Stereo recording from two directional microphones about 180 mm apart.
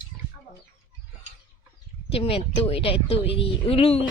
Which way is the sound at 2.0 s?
30° left (ahead or behind).